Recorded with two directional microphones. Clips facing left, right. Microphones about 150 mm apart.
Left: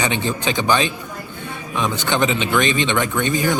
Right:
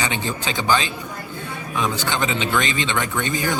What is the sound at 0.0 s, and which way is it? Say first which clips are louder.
Speech: left 4 dB; 20° left (ahead or behind).